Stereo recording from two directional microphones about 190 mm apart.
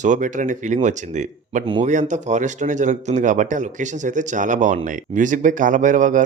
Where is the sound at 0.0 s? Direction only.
40° right (ahead or behind).